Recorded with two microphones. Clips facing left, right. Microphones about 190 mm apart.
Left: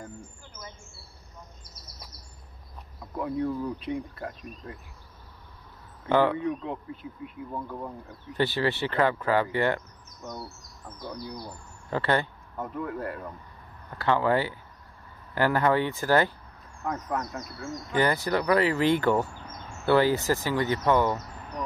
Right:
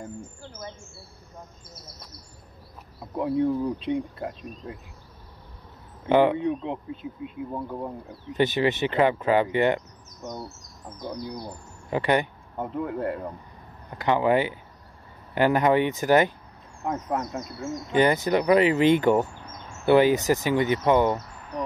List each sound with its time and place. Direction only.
3.3 s speech: 25° right (ahead or behind)
6.0 s speech: 20° right (ahead or behind)